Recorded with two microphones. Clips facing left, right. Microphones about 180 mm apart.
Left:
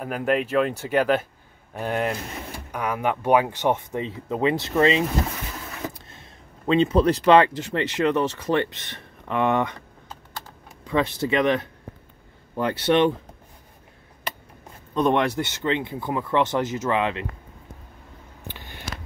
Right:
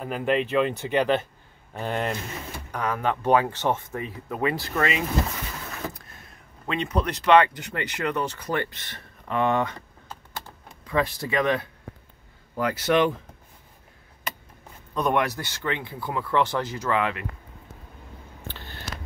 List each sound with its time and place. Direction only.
0.0 s speech: 5° left (ahead or behind)
10.9 s speech: 20° left (ahead or behind)
15.0 s speech: 25° left (ahead or behind)
18.5 s a sound: 15° left (ahead or behind)